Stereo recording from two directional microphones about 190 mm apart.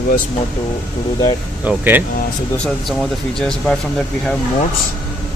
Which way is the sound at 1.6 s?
10° right (ahead or behind).